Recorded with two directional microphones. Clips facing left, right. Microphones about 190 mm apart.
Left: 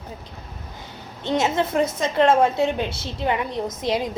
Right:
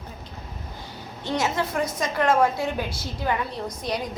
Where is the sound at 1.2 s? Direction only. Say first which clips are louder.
Left 4 dB; 20° left (ahead or behind).